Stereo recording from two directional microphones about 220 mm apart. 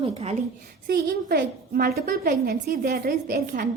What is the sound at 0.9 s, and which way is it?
A woman's voice, 45° right (ahead or behind).